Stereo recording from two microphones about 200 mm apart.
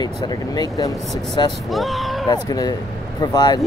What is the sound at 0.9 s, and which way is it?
Speech, centre (ahead or behind).